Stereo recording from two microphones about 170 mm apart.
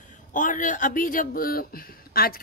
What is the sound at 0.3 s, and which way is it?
Speech, 50° left (ahead or behind).